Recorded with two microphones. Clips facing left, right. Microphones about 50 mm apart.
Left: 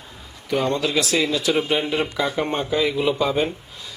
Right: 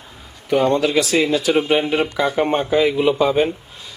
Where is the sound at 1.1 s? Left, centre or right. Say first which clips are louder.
Right 4 dB; right.